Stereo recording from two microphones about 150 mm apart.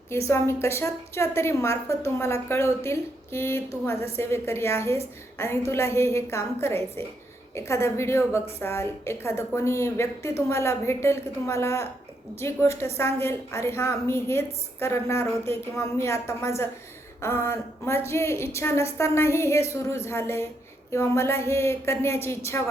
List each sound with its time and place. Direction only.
0.3 s a woman's voice: 15° left (ahead or behind)